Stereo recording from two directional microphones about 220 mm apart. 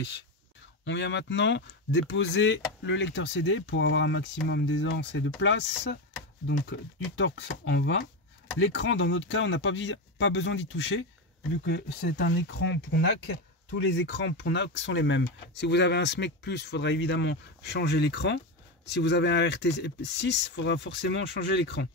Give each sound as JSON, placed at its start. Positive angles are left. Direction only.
{"t": 0.8, "sound": "speech", "side_deg": 55}